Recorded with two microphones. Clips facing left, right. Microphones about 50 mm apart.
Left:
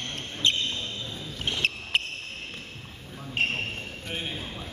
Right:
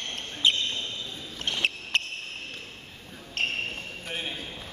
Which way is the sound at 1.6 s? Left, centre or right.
Centre.